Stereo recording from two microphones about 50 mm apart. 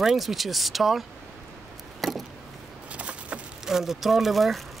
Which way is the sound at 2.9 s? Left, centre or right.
Right.